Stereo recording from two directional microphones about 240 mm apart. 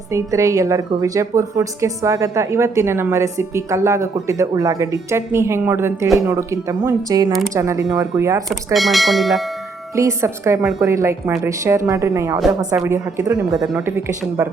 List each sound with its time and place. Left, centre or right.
0.1 s a woman's voice: centre
8.4 s speech: centre
9.9 s a woman's voice: centre